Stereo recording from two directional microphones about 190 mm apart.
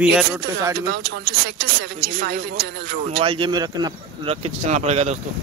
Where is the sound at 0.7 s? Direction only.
60° right (ahead or behind).